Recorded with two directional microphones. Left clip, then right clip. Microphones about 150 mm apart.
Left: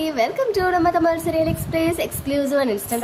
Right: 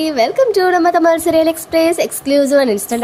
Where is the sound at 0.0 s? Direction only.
30° right (ahead or behind).